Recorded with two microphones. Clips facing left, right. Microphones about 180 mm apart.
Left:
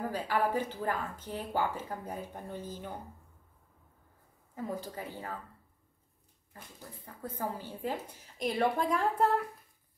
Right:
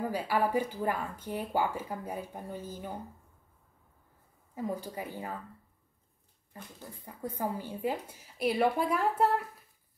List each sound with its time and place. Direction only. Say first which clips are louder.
0.1 s speech: right 1 dB; 10° right (ahead or behind)
4.7 s speech: right 1 dB; 10° right (ahead or behind)
7.2 s speech: right 3 dB; 15° right (ahead or behind)